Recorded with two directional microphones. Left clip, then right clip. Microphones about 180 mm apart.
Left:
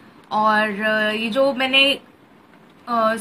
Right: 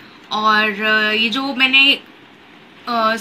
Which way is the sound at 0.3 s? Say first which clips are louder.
Right 3 dB; 55° left (ahead or behind).